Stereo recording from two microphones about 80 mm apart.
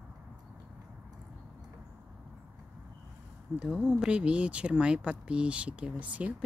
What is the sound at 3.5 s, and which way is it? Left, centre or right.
Speech, centre.